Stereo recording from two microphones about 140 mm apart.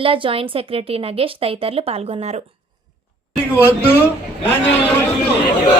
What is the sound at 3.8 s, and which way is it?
Speech, 15° left (ahead or behind).